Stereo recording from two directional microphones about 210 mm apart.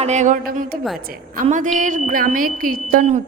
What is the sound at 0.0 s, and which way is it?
A woman's voice, 35° right (ahead or behind).